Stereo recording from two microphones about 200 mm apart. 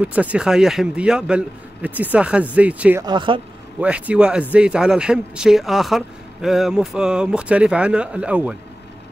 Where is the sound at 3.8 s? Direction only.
5° right (ahead or behind).